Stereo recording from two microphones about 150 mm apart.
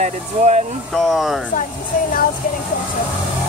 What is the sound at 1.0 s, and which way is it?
Speech, centre (ahead or behind).